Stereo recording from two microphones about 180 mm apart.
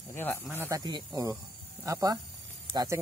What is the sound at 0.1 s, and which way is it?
Speech, 10° left (ahead or behind).